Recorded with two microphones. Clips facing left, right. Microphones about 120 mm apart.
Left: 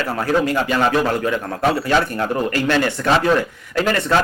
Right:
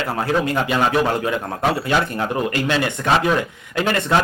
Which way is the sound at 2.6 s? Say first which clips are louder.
Left 3 dB; 15° right (ahead or behind).